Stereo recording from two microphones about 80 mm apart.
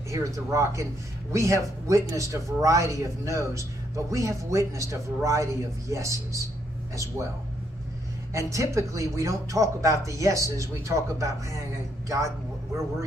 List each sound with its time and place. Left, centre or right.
0.1 s a man's voice: right
8.3 s a man's voice: right